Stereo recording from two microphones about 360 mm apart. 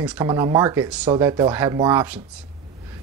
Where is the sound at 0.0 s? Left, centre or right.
Centre.